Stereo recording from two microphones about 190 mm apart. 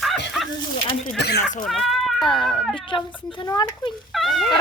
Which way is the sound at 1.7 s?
Centre (ahead or behind).